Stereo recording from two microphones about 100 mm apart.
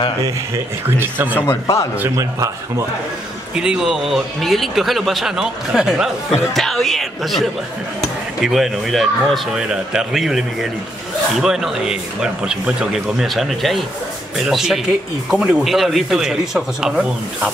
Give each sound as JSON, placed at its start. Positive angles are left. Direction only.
{"t": 0.8, "sound": "speech", "side_deg": -20}
{"t": 1.5, "sound": "a man's voice", "side_deg": 30}
{"t": 2.0, "sound": "speech", "side_deg": -30}
{"t": 3.5, "sound": "speech", "side_deg": -10}